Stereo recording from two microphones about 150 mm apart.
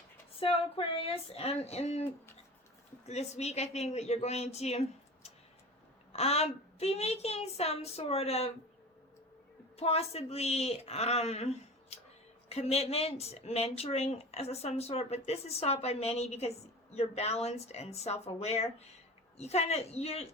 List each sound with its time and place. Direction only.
0.3 s speech: 40° left (ahead or behind)
3.1 s speech: 45° left (ahead or behind)
6.1 s speech: 45° left (ahead or behind)
9.7 s speech: 45° left (ahead or behind)